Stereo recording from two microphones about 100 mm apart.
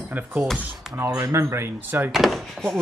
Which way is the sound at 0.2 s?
20° right (ahead or behind).